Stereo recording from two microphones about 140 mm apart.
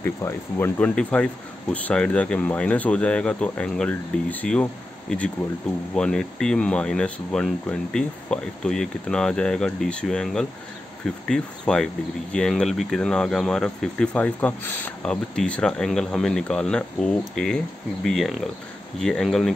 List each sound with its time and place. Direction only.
0.0 s speech: 15° left (ahead or behind)
5.9 s speech: 5° left (ahead or behind)